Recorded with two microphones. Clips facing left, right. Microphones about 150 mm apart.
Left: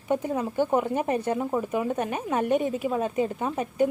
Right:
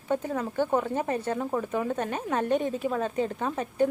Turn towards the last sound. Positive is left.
turn(degrees=10)  # may be behind; listen again after turning